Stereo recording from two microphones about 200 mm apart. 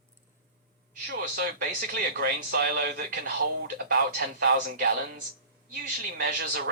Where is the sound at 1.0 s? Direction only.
50° right (ahead or behind).